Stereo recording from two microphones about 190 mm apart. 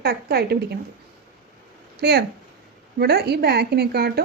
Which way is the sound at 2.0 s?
60° right (ahead or behind).